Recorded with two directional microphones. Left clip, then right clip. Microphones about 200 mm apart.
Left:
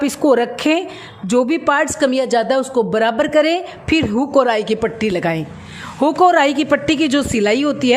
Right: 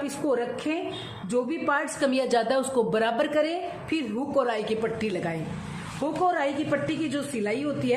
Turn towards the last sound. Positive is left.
turn(degrees=45)  # may be behind; listen again after turning